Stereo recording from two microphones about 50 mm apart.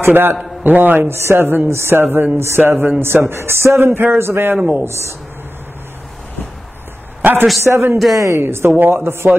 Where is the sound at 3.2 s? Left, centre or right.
Right.